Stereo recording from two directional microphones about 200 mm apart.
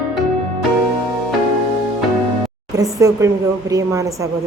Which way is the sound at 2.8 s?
15° right (ahead or behind).